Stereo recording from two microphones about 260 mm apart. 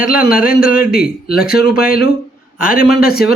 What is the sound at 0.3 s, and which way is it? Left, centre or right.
Speech, left.